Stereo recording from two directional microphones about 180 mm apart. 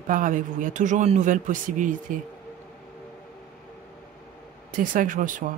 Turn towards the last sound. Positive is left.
turn(degrees=-45)  # may be behind; listen again after turning